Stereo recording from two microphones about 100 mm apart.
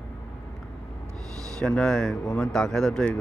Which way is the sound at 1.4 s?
10° left (ahead or behind).